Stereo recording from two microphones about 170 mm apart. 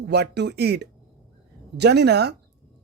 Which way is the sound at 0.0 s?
75° right (ahead or behind).